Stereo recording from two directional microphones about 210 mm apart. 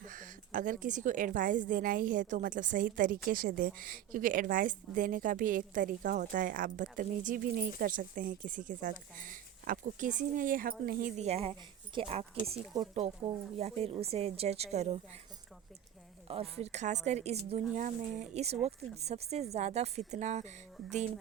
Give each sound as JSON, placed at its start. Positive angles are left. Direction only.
{"t": 0.1, "sound": "a woman's voice", "side_deg": -40}
{"t": 11.2, "sound": "speech", "side_deg": -30}
{"t": 16.3, "sound": "a woman's voice", "side_deg": -30}